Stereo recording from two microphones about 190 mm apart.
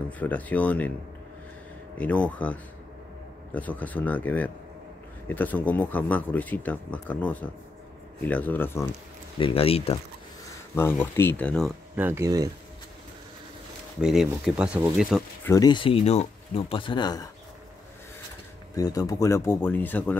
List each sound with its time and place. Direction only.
0.2 s speech: 10° left (ahead or behind)
2.0 s speech: 5° left (ahead or behind)
9.4 s speech: 30° left (ahead or behind)
10.7 s speech: 15° left (ahead or behind)
11.9 s speech: 10° right (ahead or behind)
14.0 s speech: centre (ahead or behind)
15.4 s speech: 20° left (ahead or behind)
18.8 s speech: 20° left (ahead or behind)